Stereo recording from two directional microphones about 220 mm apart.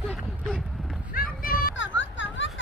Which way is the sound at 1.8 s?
60° left (ahead or behind).